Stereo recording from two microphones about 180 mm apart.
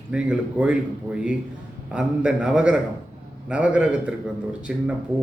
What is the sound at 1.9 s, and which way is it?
A man's voice, 5° right (ahead or behind).